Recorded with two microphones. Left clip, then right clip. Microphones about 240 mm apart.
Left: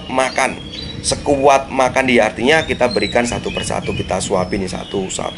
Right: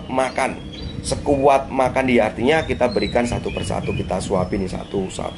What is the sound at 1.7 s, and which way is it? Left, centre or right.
Speech, centre.